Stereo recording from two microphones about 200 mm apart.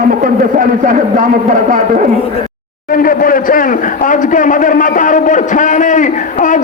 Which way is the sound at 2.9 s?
45° left (ahead or behind).